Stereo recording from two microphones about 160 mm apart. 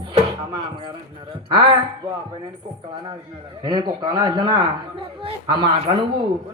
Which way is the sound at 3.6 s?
30° right (ahead or behind).